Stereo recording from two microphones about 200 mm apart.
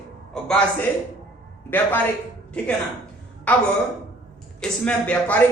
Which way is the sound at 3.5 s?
5° left (ahead or behind).